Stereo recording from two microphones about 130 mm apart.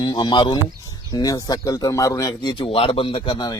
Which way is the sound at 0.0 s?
35° left (ahead or behind).